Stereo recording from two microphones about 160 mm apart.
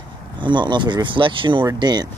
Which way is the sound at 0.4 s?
30° right (ahead or behind).